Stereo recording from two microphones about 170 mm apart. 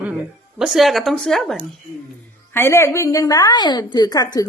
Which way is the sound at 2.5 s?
15° left (ahead or behind).